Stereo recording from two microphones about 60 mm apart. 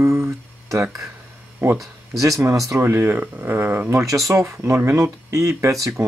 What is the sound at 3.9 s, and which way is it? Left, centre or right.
Speech, right.